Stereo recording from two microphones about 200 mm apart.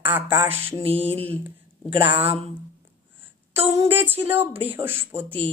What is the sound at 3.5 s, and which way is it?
Music, 10° right (ahead or behind).